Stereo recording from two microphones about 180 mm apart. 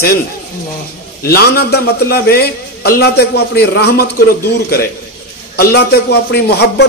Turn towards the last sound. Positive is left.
turn(degrees=65)  # may be behind; listen again after turning